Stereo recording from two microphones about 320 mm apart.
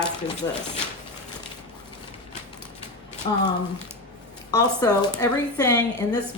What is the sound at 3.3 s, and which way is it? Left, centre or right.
Speech, centre.